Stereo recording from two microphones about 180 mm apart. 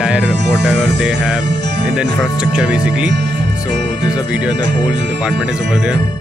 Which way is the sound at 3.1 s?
70° right (ahead or behind).